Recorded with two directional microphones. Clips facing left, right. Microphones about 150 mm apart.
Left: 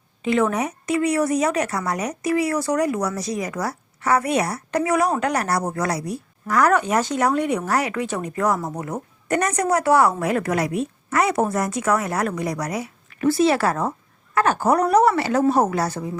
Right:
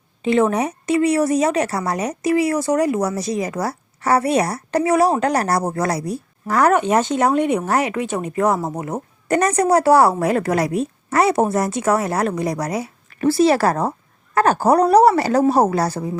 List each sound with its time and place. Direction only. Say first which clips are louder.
0.2 s a woman's voice: right 3 dB; 25° right (ahead or behind)